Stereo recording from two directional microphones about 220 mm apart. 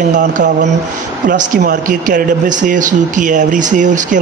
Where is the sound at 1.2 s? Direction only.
40° right (ahead or behind).